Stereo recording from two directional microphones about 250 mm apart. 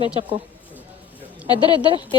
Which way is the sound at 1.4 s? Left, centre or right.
Centre.